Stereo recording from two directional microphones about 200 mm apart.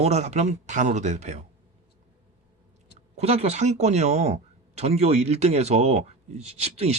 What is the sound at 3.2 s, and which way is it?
Speech, 30° right (ahead or behind).